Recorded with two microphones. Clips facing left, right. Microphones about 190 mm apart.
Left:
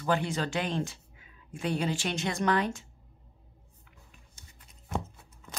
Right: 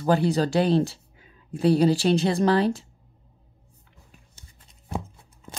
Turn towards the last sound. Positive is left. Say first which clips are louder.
# right 2 dB
turn(degrees=-35)  # may be behind; listen again after turning